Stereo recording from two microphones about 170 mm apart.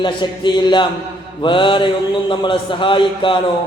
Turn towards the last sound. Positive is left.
turn(degrees=30)  # may be behind; listen again after turning